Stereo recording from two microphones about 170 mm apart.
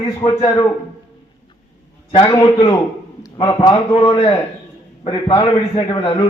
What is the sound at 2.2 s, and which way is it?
A man's voice, 20° left (ahead or behind).